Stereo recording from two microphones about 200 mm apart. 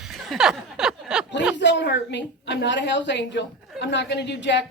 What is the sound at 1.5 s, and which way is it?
A woman's voice, 60° left (ahead or behind).